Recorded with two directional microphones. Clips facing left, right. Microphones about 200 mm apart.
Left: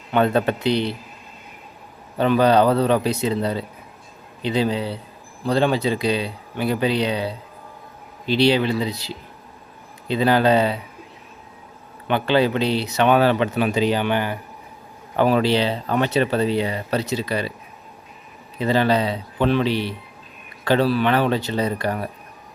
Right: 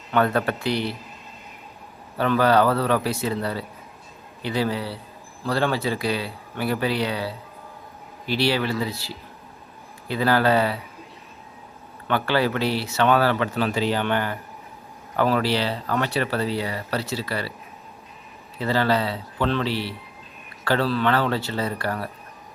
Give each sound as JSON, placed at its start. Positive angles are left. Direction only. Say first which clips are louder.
{"t": 0.1, "sound": "speech", "louder": "left 3 dB", "side_deg": 20}
{"t": 2.1, "sound": "speech", "louder": "left 3 dB", "side_deg": 20}
{"t": 12.0, "sound": "speech", "louder": "left 4 dB", "side_deg": 20}
{"t": 18.6, "sound": "speech", "louder": "left 3 dB", "side_deg": 20}